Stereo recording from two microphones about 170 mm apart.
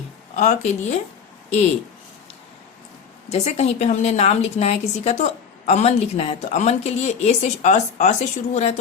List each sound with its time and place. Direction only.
0.3 s a woman's voice: 45° left (ahead or behind)
3.2 s a woman's voice: 40° left (ahead or behind)